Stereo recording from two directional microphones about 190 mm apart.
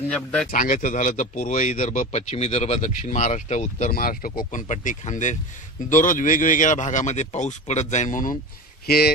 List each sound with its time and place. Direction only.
0.1 s speech: 5° left (ahead or behind)
0.5 s a man's voice: 45° left (ahead or behind)
3.9 s a man's voice: 50° left (ahead or behind)
8.8 s speech: 55° left (ahead or behind)